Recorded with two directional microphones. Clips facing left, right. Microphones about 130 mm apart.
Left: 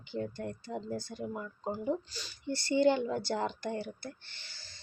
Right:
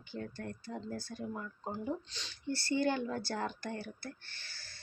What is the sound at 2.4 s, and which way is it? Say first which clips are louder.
Speech: left 5 dB; 15° left (ahead or behind).